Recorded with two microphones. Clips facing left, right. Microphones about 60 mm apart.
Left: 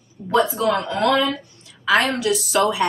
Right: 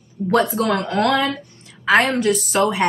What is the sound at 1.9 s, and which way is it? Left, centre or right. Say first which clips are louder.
Speech: right 2 dB; right.